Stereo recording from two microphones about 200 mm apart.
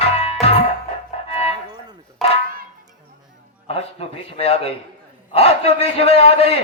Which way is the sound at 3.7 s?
30° left (ahead or behind).